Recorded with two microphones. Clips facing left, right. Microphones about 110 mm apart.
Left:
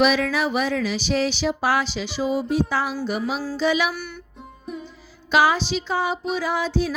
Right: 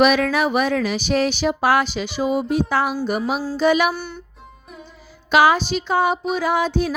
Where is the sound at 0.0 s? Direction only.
55° right (ahead or behind).